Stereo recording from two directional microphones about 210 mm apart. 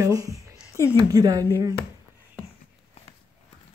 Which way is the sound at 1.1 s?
15° right (ahead or behind).